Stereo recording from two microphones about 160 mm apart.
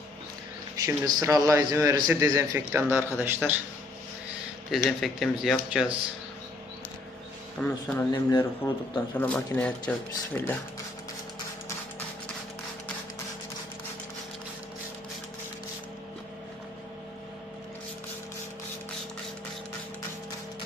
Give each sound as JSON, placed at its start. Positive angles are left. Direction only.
{"t": 0.8, "sound": "a man's voice", "side_deg": -20}
{"t": 4.7, "sound": "speech", "side_deg": 0}
{"t": 7.6, "sound": "speech", "side_deg": 10}